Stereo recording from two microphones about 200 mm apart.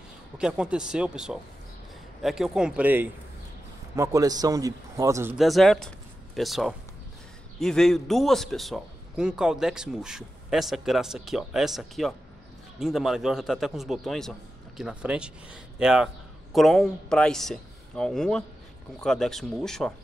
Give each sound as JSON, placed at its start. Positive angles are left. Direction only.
{"t": 0.4, "sound": "a man's voice", "side_deg": -5}
{"t": 5.4, "sound": "a man's voice", "side_deg": 0}